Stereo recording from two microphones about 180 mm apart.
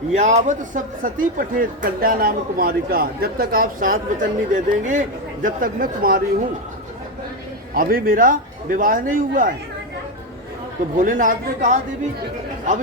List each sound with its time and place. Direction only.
0.2 s speech: 40° right (ahead or behind)
7.7 s speech: 55° right (ahead or behind)
10.9 s speech: 45° right (ahead or behind)